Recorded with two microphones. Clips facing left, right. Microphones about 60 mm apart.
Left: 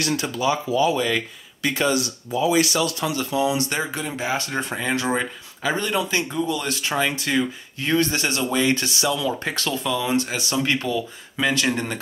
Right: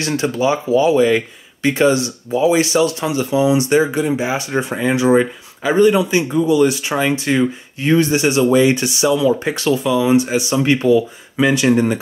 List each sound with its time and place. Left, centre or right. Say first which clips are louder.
0.0 s speech: right 5 dB; right